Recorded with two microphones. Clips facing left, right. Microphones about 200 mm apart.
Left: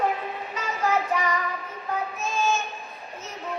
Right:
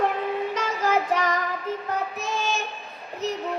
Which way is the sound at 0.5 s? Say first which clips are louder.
Left 3 dB; 90° right.